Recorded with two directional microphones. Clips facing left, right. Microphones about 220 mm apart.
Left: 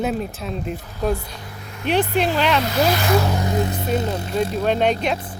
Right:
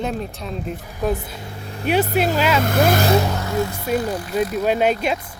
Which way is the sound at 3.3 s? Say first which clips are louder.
Left 1 dB; 15° left (ahead or behind).